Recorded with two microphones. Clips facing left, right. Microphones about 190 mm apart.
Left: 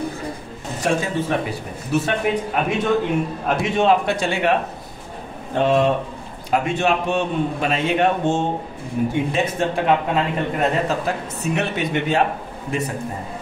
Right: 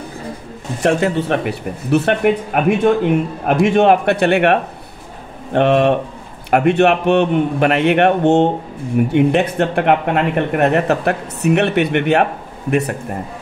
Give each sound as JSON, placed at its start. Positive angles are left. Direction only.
{"t": 0.8, "sound": "speech", "side_deg": -65}